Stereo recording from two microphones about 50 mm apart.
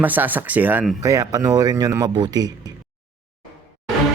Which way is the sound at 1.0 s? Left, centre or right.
Right.